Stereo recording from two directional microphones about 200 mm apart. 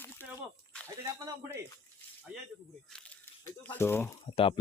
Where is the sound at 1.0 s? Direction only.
10° right (ahead or behind).